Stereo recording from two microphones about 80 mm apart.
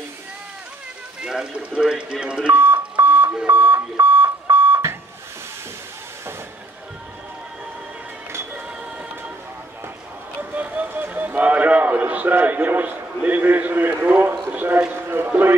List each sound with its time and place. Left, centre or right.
1.2 s speech: centre
2.5 s beep: right
3.4 s a sound: right
3.9 s alarm clock: right
10.5 s a man's voice: centre